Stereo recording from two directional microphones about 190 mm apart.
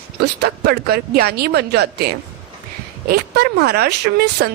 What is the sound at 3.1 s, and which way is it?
A woman's voice, 55° right (ahead or behind).